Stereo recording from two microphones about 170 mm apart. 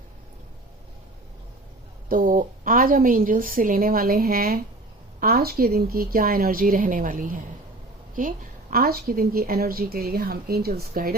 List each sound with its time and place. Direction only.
2.0 s a woman's voice: 55° right (ahead or behind)